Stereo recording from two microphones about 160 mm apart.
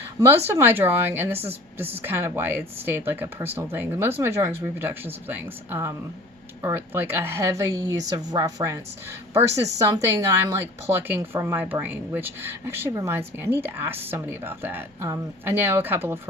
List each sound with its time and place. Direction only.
0.4 s a woman's voice: 15° right (ahead or behind)